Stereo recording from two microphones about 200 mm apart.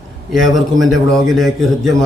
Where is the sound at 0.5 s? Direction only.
Centre (ahead or behind).